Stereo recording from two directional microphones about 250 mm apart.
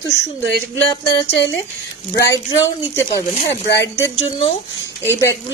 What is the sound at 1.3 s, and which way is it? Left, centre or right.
Speech, left.